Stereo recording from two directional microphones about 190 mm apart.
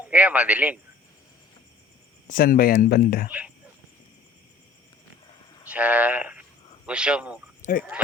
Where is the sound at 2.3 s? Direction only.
50° left (ahead or behind).